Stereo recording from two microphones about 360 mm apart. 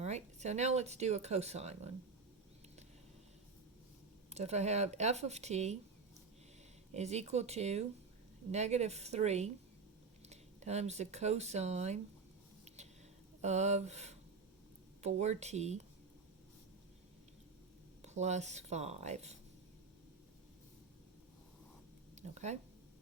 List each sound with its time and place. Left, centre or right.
0.0 s speech: centre
4.4 s speech: centre
6.9 s speech: centre
12.6 s a sound: centre
13.4 s speech: centre
18.0 s speech: centre
22.1 s a sound: centre